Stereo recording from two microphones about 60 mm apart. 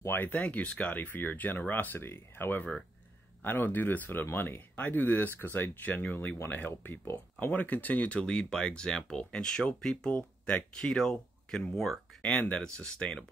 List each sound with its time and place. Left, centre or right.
0.0 s speech: left
6.1 s speech: left; by 12.0 s centre
12.2 s speech: left
12.6 s speech: centre